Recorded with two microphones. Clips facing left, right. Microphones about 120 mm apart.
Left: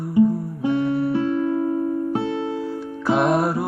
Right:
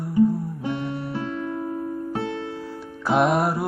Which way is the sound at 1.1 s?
15° left (ahead or behind).